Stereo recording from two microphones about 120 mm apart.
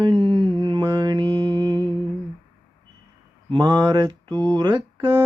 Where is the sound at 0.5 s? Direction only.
40° right (ahead or behind).